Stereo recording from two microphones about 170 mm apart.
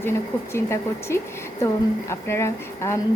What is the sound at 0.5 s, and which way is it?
A woman's voice, 15° left (ahead or behind).